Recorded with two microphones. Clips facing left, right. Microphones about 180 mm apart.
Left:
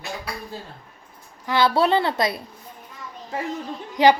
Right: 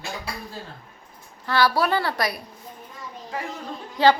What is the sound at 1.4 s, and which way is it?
Speech, 20° left (ahead or behind).